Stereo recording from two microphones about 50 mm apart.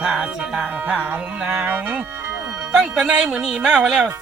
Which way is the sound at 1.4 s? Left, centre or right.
Right.